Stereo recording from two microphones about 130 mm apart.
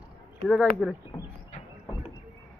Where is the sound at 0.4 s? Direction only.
5° left (ahead or behind).